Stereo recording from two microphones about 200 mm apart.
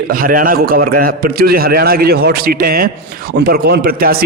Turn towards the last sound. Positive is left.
turn(degrees=-50)  # may be behind; listen again after turning